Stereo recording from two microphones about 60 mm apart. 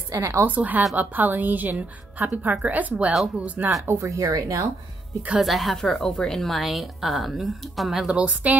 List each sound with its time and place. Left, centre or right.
0.1 s a woman's voice: right
0.5 s a woman's voice: right
3.8 s speech: right
4.2 s speech: right
5.3 s a woman's voice: centre
8.1 s a woman's voice: centre